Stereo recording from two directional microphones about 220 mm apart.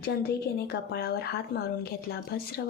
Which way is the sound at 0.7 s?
45° left (ahead or behind).